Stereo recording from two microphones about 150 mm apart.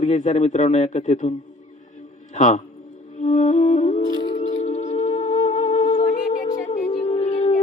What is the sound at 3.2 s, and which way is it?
Music, 50° left (ahead or behind).